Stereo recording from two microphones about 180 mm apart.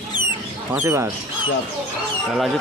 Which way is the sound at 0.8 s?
15° right (ahead or behind).